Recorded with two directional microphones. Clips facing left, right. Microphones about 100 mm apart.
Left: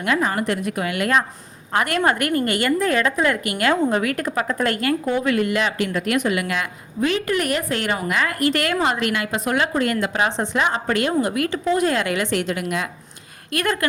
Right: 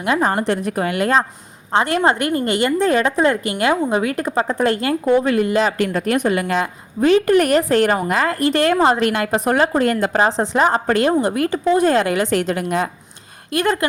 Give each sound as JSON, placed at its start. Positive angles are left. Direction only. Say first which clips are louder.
{"t": 0.2, "sound": "a woman's voice", "louder": "right 4 dB", "side_deg": -35}
{"t": 5.8, "sound": "a woman's voice", "louder": "right 3 dB", "side_deg": -45}
{"t": 13.5, "sound": "a woman's voice", "louder": "right 4 dB", "side_deg": -25}